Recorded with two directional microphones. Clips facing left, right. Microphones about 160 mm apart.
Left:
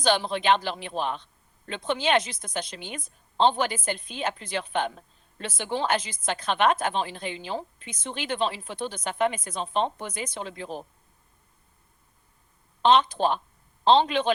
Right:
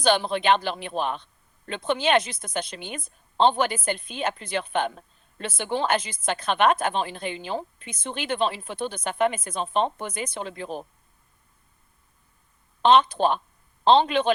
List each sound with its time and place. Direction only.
0.0 s a woman's voice: 55° right (ahead or behind)
12.8 s a woman's voice: 55° right (ahead or behind)